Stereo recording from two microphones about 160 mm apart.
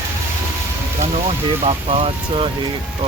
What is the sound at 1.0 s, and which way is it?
Vehicle, 40° right (ahead or behind).